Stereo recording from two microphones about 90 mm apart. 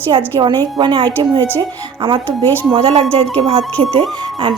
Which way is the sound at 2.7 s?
90° right.